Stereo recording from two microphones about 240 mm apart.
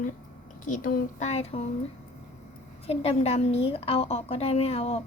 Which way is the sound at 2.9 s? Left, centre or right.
Left.